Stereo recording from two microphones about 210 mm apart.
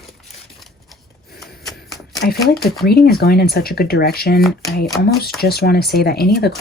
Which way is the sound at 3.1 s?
45° left (ahead or behind).